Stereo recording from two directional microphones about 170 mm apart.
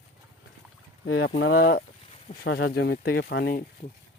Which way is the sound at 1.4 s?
70° left (ahead or behind).